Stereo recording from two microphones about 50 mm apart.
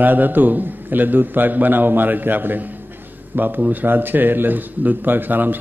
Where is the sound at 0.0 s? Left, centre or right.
Right.